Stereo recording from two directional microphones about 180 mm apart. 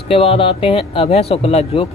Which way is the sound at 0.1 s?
30° left (ahead or behind).